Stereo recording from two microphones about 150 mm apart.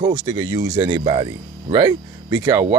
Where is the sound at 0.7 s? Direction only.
35° right (ahead or behind).